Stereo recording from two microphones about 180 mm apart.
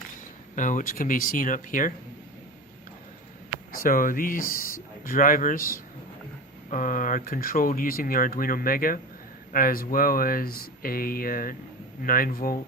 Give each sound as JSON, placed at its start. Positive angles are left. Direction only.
{"t": 0.5, "sound": "speech", "side_deg": 45}
{"t": 3.7, "sound": "speech", "side_deg": 50}